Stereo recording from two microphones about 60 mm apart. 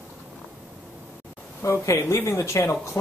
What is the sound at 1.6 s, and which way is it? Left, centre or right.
Speech, left.